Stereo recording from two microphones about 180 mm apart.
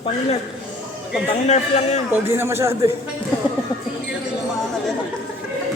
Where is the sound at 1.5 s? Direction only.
40° left (ahead or behind).